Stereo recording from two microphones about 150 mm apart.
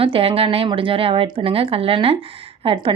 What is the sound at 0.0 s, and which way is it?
Speech, 40° right (ahead or behind).